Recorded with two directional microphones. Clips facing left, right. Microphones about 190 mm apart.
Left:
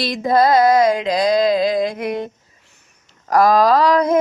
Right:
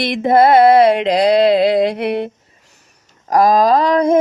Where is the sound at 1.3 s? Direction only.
75° right (ahead or behind).